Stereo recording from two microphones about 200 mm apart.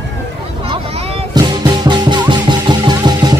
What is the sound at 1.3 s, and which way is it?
Music, 20° right (ahead or behind).